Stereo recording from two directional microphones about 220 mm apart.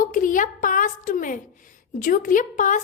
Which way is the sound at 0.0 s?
40° left (ahead or behind).